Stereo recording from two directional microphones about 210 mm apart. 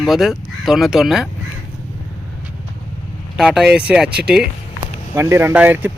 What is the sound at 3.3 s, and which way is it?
Speech, 5° right (ahead or behind).